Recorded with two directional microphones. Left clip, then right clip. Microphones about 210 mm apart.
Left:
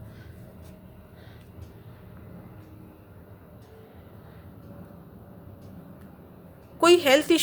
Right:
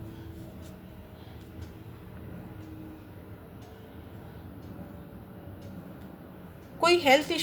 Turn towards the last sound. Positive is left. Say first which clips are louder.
# left 3 dB
turn(degrees=40)  # may be behind; listen again after turning